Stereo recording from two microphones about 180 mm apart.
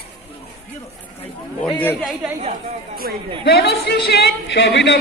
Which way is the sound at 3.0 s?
55° right (ahead or behind).